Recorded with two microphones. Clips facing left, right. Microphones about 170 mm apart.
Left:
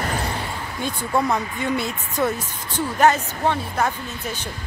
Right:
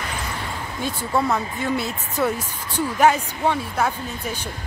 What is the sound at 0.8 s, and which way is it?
Speech, centre (ahead or behind).